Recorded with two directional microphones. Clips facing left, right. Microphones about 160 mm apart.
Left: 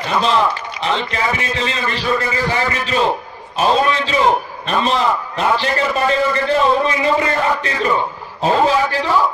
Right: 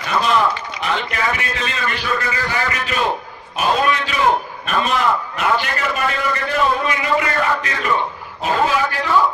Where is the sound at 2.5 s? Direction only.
30° left (ahead or behind).